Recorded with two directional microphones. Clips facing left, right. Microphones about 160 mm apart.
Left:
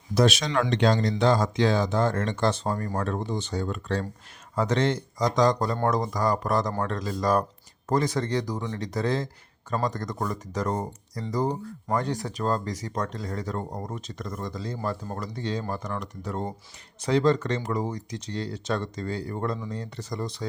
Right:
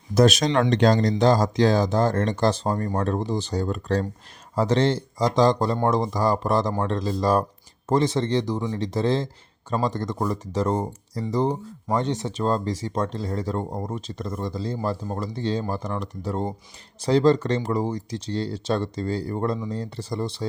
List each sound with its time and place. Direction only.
0.1 s speech: 45° right (ahead or behind)